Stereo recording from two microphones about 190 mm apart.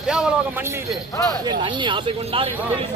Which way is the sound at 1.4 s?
25° right (ahead or behind).